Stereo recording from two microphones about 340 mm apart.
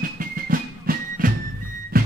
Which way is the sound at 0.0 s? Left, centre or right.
Right.